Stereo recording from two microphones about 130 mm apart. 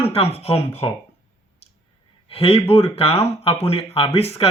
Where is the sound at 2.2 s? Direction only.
50° left (ahead or behind).